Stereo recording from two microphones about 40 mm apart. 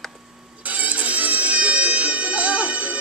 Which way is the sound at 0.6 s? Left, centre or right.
Right.